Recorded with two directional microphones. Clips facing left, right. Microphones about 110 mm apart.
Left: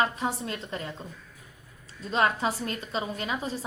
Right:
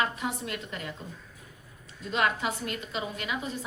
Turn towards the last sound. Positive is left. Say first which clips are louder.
# left 2 dB
turn(degrees=35)  # may be behind; listen again after turning